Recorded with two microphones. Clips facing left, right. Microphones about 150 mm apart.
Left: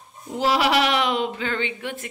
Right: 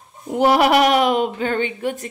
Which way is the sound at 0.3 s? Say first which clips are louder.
Right 6 dB; 55° right (ahead or behind).